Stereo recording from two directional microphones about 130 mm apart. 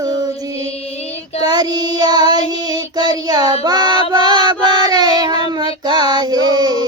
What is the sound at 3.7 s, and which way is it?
Female singing, 30° right (ahead or behind).